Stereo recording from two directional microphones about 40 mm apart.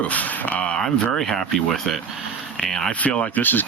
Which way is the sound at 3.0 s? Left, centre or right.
Left.